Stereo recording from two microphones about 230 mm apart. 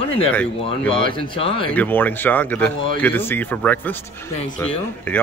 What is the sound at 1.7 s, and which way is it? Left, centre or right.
Speech, centre.